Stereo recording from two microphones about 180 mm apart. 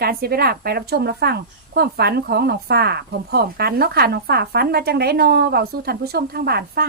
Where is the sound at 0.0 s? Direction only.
60° right (ahead or behind).